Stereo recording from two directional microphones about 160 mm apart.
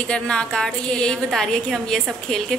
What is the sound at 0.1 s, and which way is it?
A woman's voice, 5° left (ahead or behind).